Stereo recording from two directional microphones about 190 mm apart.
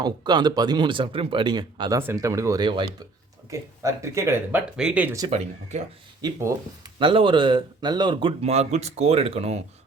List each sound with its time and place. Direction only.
0.0 s speech: 20° right (ahead or behind); by 5.1 s 5° right (ahead or behind)
5.3 s speech: 35° right (ahead or behind)
6.2 s speech: 20° right (ahead or behind); by 9.6 s 35° right (ahead or behind)